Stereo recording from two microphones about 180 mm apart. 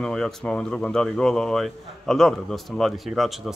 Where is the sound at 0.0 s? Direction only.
5° left (ahead or behind).